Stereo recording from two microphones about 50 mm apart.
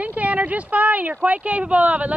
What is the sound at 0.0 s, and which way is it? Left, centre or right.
Speech, right.